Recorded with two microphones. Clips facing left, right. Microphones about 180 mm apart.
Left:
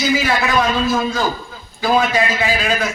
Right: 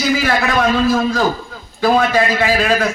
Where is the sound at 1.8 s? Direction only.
60° right (ahead or behind).